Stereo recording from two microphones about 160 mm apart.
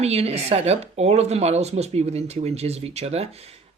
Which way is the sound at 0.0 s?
40° right (ahead or behind).